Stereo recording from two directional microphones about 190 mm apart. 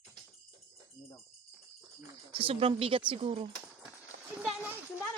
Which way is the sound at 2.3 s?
30° right (ahead or behind).